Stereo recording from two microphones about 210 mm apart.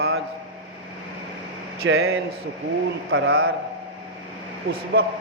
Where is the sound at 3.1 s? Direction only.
80° right.